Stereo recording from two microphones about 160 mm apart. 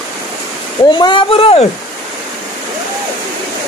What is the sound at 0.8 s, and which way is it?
Speech, 30° left (ahead or behind).